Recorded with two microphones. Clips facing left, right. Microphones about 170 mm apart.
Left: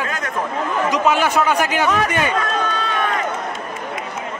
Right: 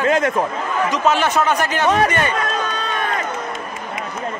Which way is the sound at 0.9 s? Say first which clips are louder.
Even; 10° left (ahead or behind).